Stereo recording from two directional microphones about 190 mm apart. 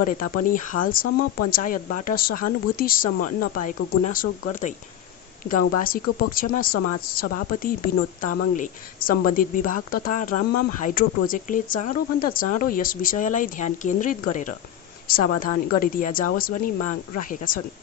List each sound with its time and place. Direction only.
0.0 s speech: 45° left (ahead or behind)